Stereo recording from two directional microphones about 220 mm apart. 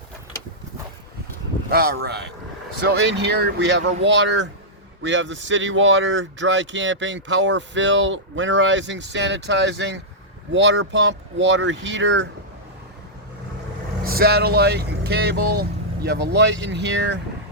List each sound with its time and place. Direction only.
1.7 s speech: 45° right (ahead or behind)
14.0 s speech: 45° right (ahead or behind)